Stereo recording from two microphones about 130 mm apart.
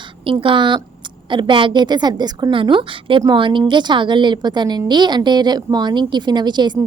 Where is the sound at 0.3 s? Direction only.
40° right (ahead or behind).